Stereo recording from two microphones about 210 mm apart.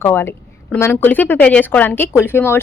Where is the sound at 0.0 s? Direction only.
10° left (ahead or behind).